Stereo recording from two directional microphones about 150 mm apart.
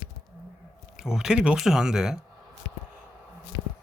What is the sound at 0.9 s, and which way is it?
Speech, 5° right (ahead or behind).